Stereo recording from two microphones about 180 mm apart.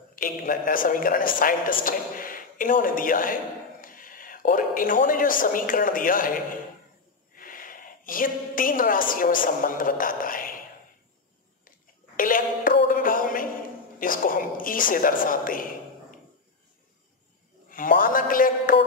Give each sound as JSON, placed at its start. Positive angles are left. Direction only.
{"t": 0.1, "sound": "a woman's voice", "side_deg": 50}
{"t": 12.2, "sound": "a sound", "side_deg": 50}
{"t": 12.8, "sound": "music", "side_deg": 50}
{"t": 13.9, "sound": "a woman's voice", "side_deg": 50}
{"t": 17.6, "sound": "a man's voice", "side_deg": 50}